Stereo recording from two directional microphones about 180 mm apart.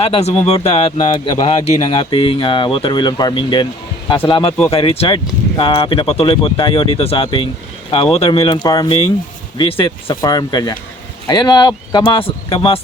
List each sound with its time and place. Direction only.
0.0 s speech: 35° left (ahead or behind)